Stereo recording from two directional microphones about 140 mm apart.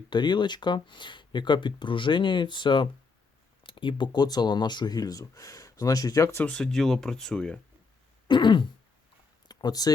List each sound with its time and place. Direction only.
0.1 s speech: 30° left (ahead or behind)
6.4 s speech: 5° left (ahead or behind)
8.3 s throat clearing: 35° left (ahead or behind)
9.5 s speech: 30° left (ahead or behind)